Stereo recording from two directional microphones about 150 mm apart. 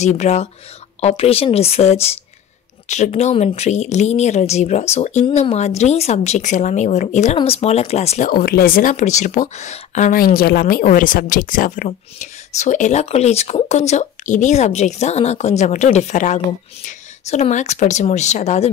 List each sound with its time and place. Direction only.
0.0 s speech: 50° left (ahead or behind)
8.3 s speech: 75° left (ahead or behind)
8.9 s speech: 50° left (ahead or behind)